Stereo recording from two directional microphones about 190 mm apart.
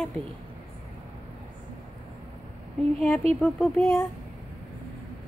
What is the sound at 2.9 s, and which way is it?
Speech, centre (ahead or behind).